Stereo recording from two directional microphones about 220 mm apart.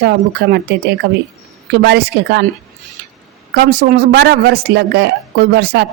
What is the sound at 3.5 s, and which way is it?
Speech, 45° right (ahead or behind).